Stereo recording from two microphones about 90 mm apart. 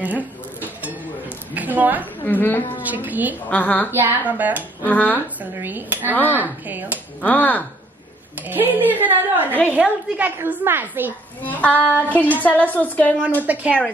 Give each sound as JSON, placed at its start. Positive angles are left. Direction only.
{"t": 0.0, "sound": "a sound", "side_deg": -20}
{"t": 1.5, "sound": "a woman's voice", "side_deg": -20}
{"t": 2.2, "sound": "a woman's voice", "side_deg": 20}
{"t": 2.8, "sound": "a woman's voice", "side_deg": -20}
{"t": 3.4, "sound": "a woman's voice", "side_deg": 20}
{"t": 3.9, "sound": "a woman's voice", "side_deg": -20}
{"t": 4.8, "sound": "a woman's voice", "side_deg": 20}
{"t": 5.4, "sound": "a woman's voice", "side_deg": -20}
{"t": 7.2, "sound": "a woman's voice", "side_deg": 20}
{"t": 8.5, "sound": "a woman's voice", "side_deg": -20}
{"t": 11.4, "sound": "a woman's voice", "side_deg": 15}
{"t": 13.4, "sound": "a woman's voice", "side_deg": -15}